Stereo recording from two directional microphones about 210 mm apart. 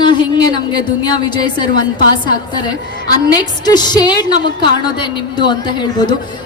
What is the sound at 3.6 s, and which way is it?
A woman's voice, 20° left (ahead or behind).